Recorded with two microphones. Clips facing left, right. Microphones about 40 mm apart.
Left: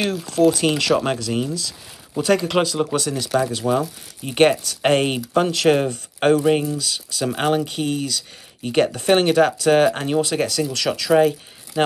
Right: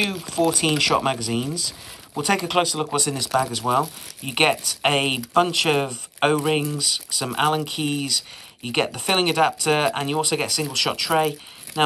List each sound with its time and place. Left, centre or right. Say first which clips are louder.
0.0 s speech: left 4 dB; centre
3.6 s speech: left 1 dB; right